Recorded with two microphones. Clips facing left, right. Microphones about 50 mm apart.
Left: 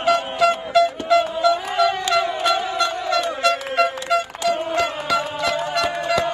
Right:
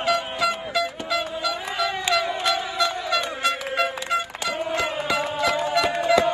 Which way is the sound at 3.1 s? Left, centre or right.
Right.